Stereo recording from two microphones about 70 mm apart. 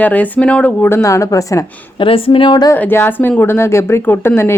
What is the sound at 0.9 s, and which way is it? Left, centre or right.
Speech, left.